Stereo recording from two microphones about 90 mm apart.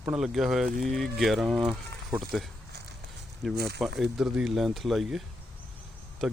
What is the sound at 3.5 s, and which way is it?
Speech, centre (ahead or behind).